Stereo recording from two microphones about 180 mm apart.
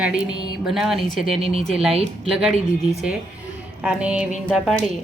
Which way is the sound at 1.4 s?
35° right (ahead or behind).